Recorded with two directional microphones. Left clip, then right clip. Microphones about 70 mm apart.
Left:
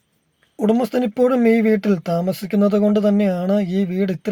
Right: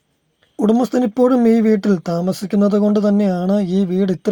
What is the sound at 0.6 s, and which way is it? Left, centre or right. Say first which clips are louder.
Speech: right 2 dB; right.